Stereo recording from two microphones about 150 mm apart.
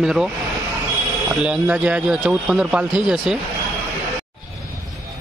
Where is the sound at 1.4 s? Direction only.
5° right (ahead or behind).